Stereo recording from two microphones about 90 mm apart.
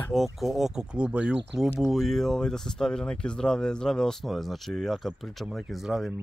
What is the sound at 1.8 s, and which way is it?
Speech, centre (ahead or behind).